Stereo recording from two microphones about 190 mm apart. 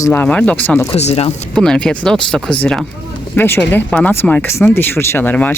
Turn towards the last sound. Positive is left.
turn(degrees=10)  # may be behind; listen again after turning